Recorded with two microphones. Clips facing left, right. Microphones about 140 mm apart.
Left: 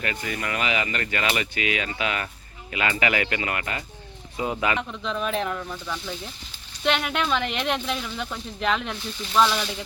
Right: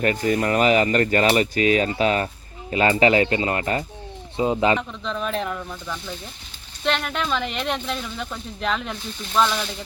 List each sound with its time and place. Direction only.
0.0 s speech: 40° right (ahead or behind)
4.8 s speech: centre (ahead or behind)